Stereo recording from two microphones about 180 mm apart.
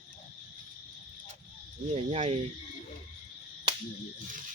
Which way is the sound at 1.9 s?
35° right (ahead or behind).